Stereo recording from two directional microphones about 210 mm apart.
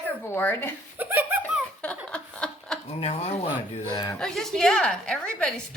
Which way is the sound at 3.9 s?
15° left (ahead or behind).